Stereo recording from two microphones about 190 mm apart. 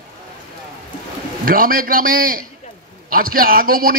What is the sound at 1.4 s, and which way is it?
A man's voice, 50° right (ahead or behind).